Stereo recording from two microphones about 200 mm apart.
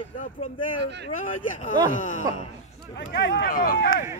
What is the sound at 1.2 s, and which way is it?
Speech, 40° left (ahead or behind).